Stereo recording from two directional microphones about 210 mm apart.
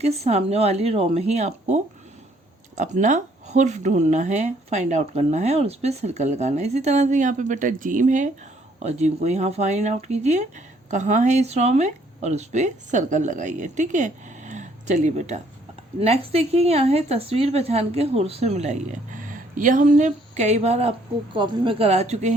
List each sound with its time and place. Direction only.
0.0 s a woman's voice: 30° right (ahead or behind)